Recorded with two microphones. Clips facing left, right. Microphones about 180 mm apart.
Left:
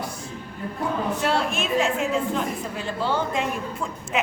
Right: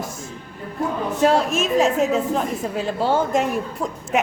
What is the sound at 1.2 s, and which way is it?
A woman's voice, 40° right (ahead or behind).